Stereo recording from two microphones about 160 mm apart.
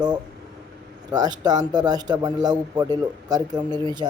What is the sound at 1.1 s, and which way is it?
Speech, 25° right (ahead or behind).